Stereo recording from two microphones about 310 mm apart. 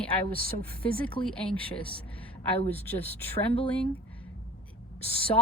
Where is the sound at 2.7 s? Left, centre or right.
Centre.